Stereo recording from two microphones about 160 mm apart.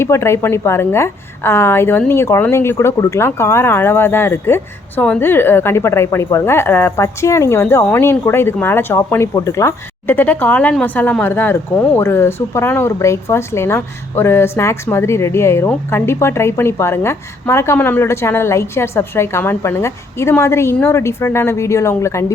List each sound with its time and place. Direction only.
0.0 s a woman's voice: 15° left (ahead or behind)